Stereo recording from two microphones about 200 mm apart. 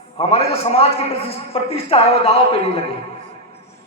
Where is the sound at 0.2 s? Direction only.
30° left (ahead or behind).